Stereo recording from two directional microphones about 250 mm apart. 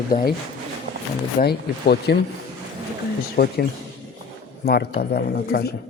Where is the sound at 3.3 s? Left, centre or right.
Left.